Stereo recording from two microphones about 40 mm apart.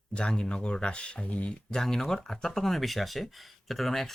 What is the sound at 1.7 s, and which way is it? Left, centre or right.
Speech, centre.